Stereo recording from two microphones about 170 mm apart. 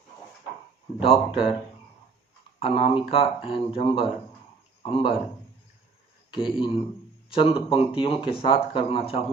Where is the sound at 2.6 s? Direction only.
35° left (ahead or behind).